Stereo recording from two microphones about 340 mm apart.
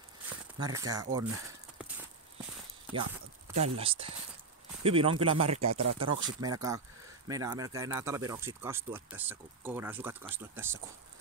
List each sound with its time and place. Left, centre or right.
0.6 s speech: centre
2.9 s a sound: centre
3.6 s speech: centre
5.6 s speech: right
6.2 s speech: centre